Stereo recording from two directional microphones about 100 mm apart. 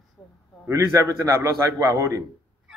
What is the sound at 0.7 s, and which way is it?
A man's voice, 30° right (ahead or behind).